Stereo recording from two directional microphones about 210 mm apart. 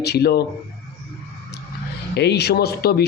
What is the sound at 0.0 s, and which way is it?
Speech, 50° left (ahead or behind).